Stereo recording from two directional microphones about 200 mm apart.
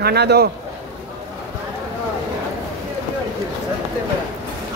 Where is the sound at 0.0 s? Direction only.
55° right (ahead or behind).